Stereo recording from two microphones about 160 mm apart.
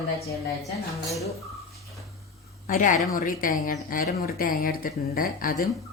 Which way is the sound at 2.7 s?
55° left (ahead or behind).